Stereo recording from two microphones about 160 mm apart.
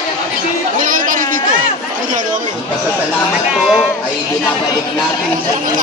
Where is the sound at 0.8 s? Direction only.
55° right (ahead or behind).